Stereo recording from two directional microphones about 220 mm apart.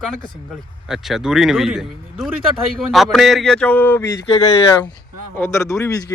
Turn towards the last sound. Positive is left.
turn(degrees=15)  # may be behind; listen again after turning